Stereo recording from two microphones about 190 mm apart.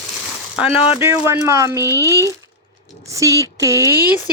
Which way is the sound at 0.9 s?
15° right (ahead or behind).